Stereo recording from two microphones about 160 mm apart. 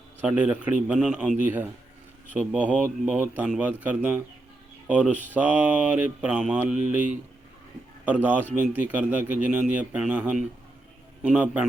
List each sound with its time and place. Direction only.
0.2 s speech: 10° right (ahead or behind)
8.0 s speech: 10° right (ahead or behind)